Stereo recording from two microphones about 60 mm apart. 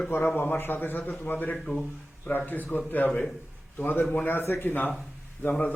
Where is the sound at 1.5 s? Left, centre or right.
Centre.